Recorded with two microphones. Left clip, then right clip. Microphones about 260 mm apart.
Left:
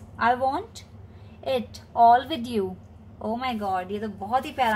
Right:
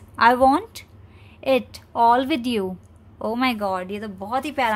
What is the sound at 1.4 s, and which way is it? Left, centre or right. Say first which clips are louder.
A woman's voice: right 6 dB; right.